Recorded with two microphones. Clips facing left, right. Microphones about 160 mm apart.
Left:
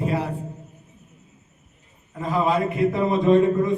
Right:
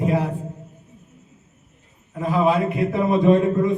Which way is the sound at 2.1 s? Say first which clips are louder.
Right 3 dB; 10° right (ahead or behind).